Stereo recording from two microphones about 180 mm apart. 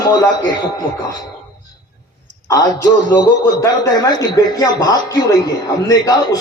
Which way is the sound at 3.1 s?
20° left (ahead or behind).